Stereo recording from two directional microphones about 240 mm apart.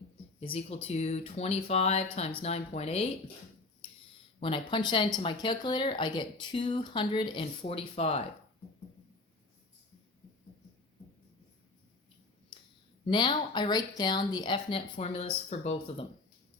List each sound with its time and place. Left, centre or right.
0.3 s speech: left
4.4 s speech: left
13.1 s speech: centre